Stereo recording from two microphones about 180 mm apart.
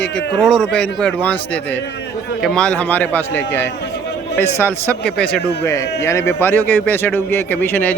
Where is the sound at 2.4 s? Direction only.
5° left (ahead or behind).